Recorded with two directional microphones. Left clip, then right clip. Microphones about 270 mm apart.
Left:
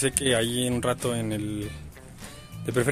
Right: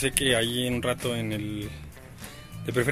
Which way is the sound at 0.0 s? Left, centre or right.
Centre.